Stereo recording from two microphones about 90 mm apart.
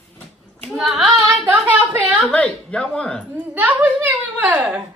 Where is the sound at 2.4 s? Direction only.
10° left (ahead or behind).